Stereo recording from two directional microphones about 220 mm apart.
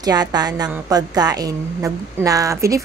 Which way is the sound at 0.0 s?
20° right (ahead or behind).